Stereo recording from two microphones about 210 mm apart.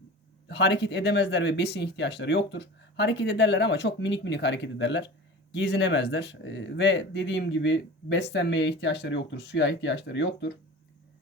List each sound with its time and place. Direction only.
0.4 s speech: 55° left (ahead or behind)